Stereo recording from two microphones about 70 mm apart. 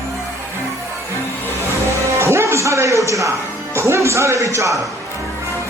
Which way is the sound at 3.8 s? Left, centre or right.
Right.